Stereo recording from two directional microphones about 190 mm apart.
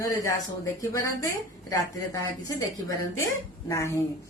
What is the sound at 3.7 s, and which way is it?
Speech, 15° left (ahead or behind).